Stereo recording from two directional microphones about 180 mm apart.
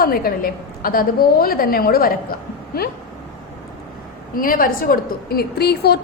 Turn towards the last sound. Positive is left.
turn(degrees=65)  # may be behind; listen again after turning